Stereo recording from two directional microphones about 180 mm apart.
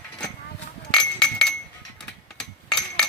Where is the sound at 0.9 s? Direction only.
5° left (ahead or behind).